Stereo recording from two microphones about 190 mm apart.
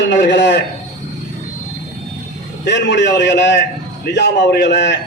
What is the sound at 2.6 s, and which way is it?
A man's voice, 65° left (ahead or behind).